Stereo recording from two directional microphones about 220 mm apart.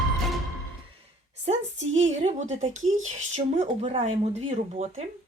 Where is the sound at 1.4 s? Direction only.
30° right (ahead or behind).